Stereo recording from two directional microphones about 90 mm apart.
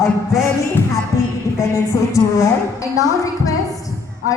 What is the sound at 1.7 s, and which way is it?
A woman's voice, 35° left (ahead or behind).